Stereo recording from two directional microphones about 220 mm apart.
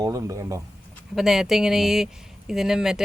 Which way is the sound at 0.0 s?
15° right (ahead or behind).